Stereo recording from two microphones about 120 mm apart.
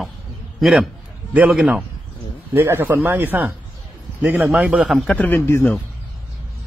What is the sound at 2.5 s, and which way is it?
Speech, 20° right (ahead or behind).